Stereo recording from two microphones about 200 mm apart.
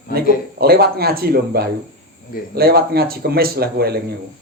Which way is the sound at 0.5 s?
50° right (ahead or behind).